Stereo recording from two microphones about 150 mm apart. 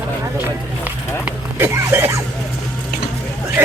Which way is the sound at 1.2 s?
15° right (ahead or behind).